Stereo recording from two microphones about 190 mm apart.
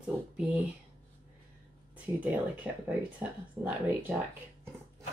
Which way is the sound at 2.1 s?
10° right (ahead or behind).